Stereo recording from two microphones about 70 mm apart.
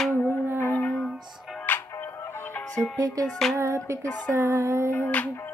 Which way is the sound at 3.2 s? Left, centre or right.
Centre.